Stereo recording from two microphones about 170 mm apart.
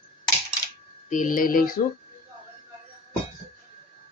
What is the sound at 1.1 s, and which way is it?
Speech, 50° left (ahead or behind).